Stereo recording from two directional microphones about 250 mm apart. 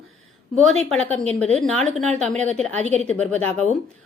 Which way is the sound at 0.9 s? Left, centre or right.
Centre.